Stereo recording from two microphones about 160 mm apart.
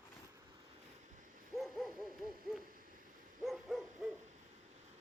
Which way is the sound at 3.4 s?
Centre (ahead or behind).